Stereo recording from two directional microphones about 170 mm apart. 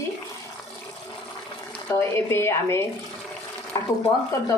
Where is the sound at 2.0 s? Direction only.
15° left (ahead or behind).